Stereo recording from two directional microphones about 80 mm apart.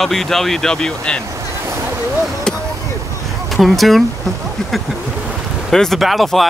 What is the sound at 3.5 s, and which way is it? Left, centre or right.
Speech, centre.